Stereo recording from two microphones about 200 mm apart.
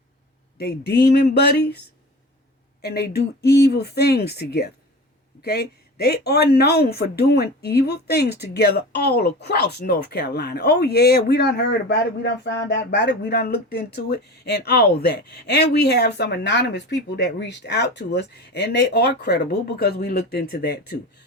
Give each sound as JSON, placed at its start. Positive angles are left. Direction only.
{"t": 0.6, "sound": "speech", "side_deg": 55}
{"t": 2.8, "sound": "speech", "side_deg": 50}